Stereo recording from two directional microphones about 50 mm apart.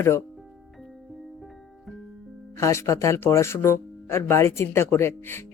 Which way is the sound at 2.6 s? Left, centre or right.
Left.